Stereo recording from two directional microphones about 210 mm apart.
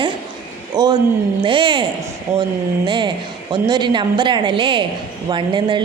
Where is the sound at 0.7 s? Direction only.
20° right (ahead or behind).